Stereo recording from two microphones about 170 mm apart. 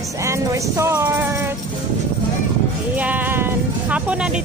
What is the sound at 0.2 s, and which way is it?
Speech, 15° right (ahead or behind).